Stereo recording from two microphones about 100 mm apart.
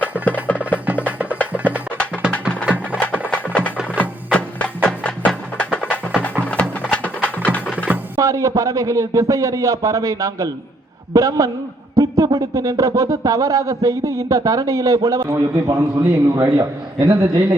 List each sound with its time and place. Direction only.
1.0 s music: 15° right (ahead or behind)
3.0 s music: 15° left (ahead or behind)
8.2 s a man's voice: 35° right (ahead or behind)
11.9 s a sound: 35° right (ahead or behind)
13.0 s a man's voice: 35° right (ahead or behind)